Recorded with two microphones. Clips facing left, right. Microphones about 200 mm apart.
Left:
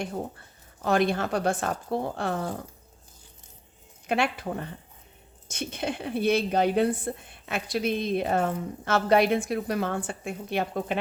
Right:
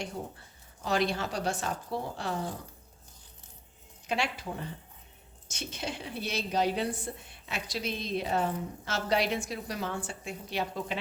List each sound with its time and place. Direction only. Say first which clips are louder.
0.8 s a woman's voice: left 5 dB; 55° left (ahead or behind)
4.0 s a woman's voice: left 6 dB; 55° left (ahead or behind)